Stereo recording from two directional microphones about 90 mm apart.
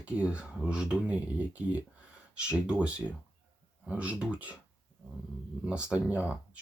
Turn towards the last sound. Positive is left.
turn(degrees=-15)  # may be behind; listen again after turning